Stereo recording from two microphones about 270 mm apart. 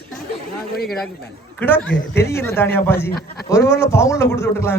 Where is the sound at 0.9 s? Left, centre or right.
Centre.